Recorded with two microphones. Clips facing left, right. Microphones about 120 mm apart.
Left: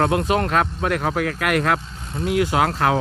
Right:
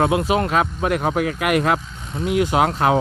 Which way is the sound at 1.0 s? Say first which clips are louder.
Right 2 dB; 20° right (ahead or behind).